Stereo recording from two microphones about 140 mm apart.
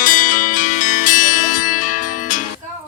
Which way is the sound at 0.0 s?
80° left.